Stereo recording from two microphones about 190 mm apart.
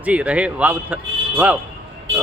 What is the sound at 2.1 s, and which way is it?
Speech, 90° right.